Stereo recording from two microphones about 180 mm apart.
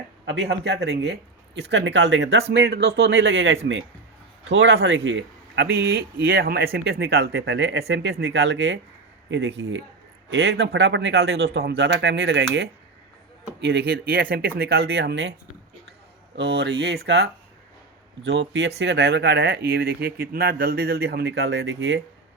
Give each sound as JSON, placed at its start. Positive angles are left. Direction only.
{"t": 0.3, "sound": "speech", "side_deg": -70}
{"t": 2.5, "sound": "speech", "side_deg": -65}
{"t": 4.5, "sound": "speech", "side_deg": -70}
{"t": 16.4, "sound": "speech", "side_deg": -65}
{"t": 18.3, "sound": "speech", "side_deg": -70}